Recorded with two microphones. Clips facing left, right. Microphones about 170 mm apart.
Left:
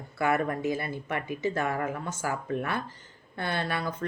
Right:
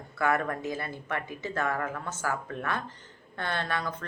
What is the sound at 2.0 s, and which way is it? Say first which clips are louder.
Speech: left 1 dB; 10° left (ahead or behind).